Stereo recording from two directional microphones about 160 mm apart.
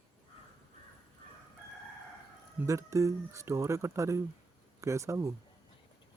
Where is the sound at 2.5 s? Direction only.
20° right (ahead or behind).